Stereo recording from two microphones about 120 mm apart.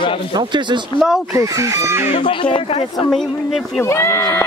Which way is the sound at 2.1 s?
45° left (ahead or behind).